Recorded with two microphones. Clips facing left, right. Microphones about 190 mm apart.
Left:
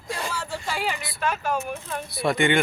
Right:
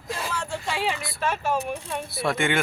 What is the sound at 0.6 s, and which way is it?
Speech, centre (ahead or behind).